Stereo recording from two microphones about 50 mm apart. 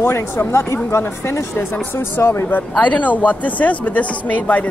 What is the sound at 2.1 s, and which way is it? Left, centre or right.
Speech, left.